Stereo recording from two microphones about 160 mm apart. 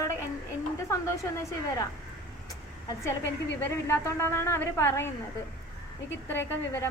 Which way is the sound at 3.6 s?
15° left (ahead or behind).